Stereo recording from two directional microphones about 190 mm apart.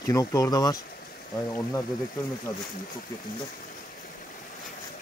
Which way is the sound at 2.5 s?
20° left (ahead or behind).